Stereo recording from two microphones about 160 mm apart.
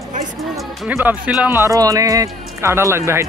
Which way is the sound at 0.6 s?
10° right (ahead or behind).